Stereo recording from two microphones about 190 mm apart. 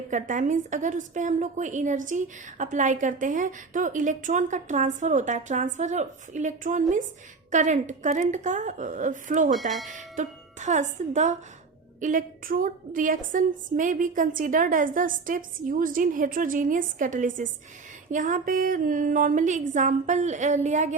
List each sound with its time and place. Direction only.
0.1 s a woman's voice: 40° right (ahead or behind)
9.5 s speech: centre (ahead or behind)
9.9 s a woman's voice: 40° right (ahead or behind)